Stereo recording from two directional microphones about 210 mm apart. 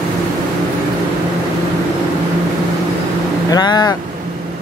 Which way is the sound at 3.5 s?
20° left (ahead or behind).